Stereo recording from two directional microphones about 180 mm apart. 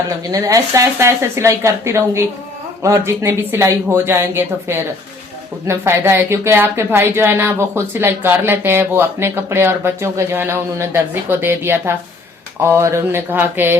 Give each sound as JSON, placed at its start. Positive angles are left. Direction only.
{"t": 0.3, "sound": "speech", "side_deg": -20}